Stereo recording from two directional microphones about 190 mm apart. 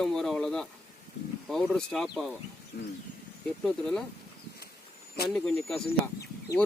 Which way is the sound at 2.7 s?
55° left (ahead or behind).